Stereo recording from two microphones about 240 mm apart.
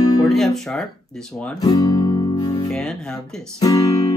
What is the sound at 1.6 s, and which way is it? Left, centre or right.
Music, centre.